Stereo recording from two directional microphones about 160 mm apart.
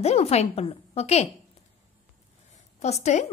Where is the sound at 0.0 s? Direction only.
40° left (ahead or behind).